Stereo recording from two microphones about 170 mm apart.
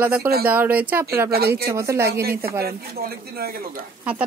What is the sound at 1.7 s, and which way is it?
Speech, 15° right (ahead or behind).